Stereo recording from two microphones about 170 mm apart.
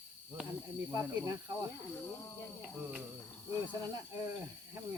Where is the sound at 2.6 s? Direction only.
5° right (ahead or behind).